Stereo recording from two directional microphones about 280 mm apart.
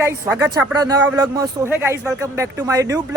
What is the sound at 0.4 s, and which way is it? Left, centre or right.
Speech, centre.